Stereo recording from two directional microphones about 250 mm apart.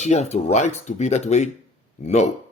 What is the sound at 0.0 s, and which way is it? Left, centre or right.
Speech, left.